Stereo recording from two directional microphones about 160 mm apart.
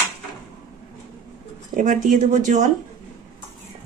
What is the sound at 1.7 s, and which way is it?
Speech, 55° right (ahead or behind).